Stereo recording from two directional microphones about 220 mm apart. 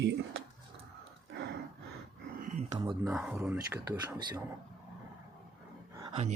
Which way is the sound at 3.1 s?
5° right (ahead or behind).